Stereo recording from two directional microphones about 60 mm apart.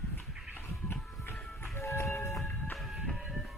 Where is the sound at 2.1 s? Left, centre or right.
Left.